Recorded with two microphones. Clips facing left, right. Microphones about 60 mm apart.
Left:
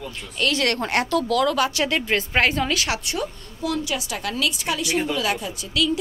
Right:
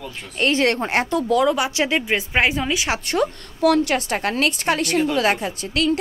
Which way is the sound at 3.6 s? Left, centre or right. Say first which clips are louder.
Right 8 dB; right.